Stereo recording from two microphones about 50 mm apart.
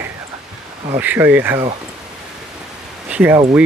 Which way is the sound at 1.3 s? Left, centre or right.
Right.